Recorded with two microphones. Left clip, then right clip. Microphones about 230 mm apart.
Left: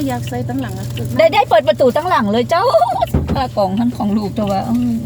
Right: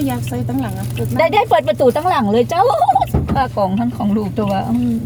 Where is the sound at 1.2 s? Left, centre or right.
Centre.